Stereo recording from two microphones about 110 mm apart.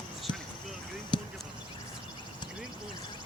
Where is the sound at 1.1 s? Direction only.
45° left (ahead or behind).